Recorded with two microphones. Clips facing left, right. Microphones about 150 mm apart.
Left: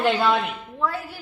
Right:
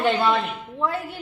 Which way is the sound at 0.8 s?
25° right (ahead or behind).